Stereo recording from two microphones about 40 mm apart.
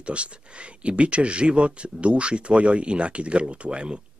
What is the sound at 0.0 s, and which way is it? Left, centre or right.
Speech, right.